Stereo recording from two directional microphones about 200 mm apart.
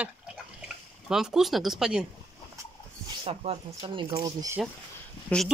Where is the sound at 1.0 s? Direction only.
Centre (ahead or behind).